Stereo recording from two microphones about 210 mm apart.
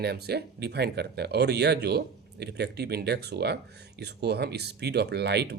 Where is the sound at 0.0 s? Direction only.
50° right (ahead or behind).